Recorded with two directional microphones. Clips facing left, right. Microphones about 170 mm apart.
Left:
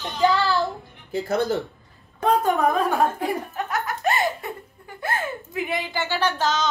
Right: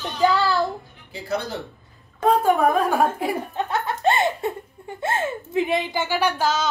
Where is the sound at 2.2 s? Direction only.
10° right (ahead or behind).